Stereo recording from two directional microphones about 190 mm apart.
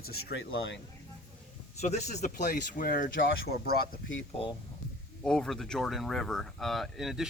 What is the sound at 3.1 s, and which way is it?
Speech, 75° left (ahead or behind).